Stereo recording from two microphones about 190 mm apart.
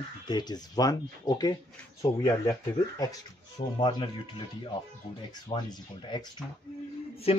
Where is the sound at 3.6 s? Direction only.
35° left (ahead or behind).